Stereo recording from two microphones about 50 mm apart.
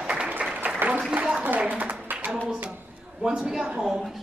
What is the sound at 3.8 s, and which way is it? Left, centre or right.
Speech, centre.